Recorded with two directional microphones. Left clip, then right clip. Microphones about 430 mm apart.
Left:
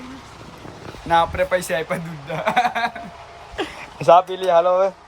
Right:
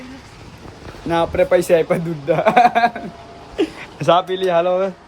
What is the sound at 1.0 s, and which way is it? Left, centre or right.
A man's voice, centre.